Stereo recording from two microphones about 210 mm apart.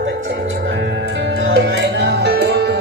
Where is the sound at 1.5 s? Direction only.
55° right (ahead or behind).